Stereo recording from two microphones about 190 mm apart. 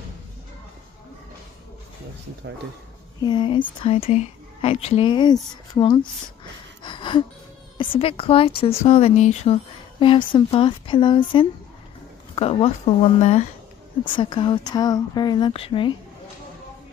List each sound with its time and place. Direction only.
3.2 s a woman's voice: 25° left (ahead or behind)
6.8 s a sound: 25° left (ahead or behind)
7.7 s a woman's voice: 25° left (ahead or behind)